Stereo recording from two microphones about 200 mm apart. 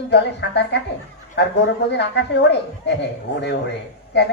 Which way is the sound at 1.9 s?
60° left (ahead or behind).